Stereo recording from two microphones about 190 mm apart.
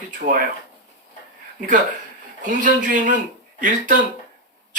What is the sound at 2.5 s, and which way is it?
Speech, 45° right (ahead or behind).